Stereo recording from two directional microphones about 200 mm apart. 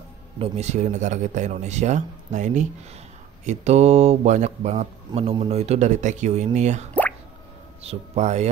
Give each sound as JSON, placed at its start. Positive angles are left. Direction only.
{"t": 0.4, "sound": "speech", "side_deg": -35}
{"t": 6.9, "sound": "plop", "side_deg": 5}
{"t": 7.8, "sound": "speech", "side_deg": -30}